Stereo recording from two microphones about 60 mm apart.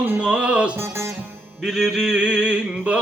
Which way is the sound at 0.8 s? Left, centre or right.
Right.